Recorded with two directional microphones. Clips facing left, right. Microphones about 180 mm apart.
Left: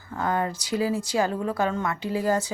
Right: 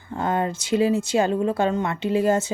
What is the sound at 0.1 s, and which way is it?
A woman's voice, 25° right (ahead or behind).